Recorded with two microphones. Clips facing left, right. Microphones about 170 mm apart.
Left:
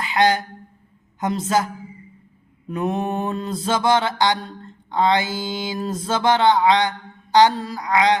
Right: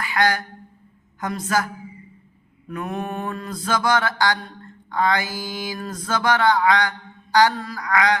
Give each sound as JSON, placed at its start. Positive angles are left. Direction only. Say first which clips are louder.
{"t": 0.0, "sound": "speech", "louder": "left 3 dB", "side_deg": 20}
{"t": 1.2, "sound": "mantra", "louder": "left 3 dB", "side_deg": 25}
{"t": 2.6, "sound": "mantra", "louder": "left 5 dB", "side_deg": 25}